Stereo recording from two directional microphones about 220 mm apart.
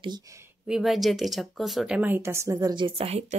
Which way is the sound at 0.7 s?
Centre (ahead or behind).